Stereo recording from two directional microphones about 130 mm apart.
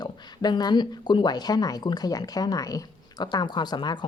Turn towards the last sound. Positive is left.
turn(degrees=35)  # may be behind; listen again after turning